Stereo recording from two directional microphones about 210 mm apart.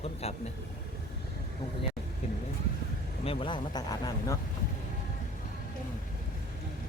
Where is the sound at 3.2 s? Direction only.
25° left (ahead or behind).